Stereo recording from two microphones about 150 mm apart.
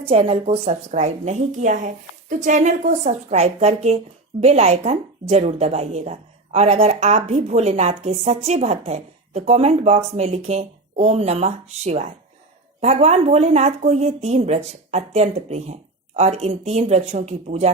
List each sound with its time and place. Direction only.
0.0 s a woman's voice: 40° right (ahead or behind)